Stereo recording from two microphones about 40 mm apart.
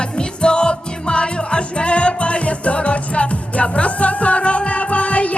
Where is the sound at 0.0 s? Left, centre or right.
Left.